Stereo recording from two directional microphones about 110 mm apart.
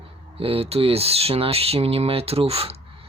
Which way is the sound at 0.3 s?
60° right (ahead or behind).